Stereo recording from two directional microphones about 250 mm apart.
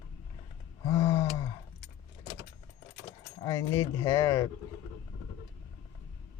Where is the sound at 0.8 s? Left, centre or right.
Centre.